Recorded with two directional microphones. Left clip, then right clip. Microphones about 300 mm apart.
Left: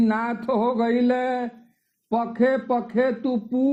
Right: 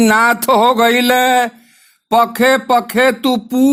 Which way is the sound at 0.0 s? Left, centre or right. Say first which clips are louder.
Right 13 dB; right.